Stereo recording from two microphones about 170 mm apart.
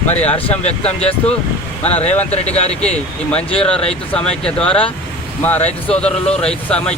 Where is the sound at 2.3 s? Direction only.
40° left (ahead or behind).